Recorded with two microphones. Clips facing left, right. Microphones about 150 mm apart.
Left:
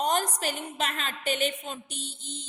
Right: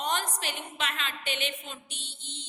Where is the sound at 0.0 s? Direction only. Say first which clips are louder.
Left 5 dB; 40° left (ahead or behind).